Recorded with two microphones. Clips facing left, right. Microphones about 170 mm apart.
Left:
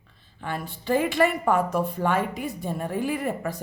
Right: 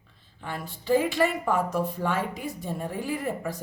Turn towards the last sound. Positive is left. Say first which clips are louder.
# left 2 dB
turn(degrees=60)  # may be behind; listen again after turning